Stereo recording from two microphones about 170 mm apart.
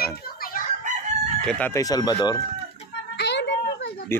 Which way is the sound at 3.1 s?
90° left.